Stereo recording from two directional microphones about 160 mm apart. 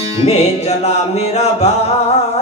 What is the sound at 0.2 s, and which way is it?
Music, 40° left (ahead or behind).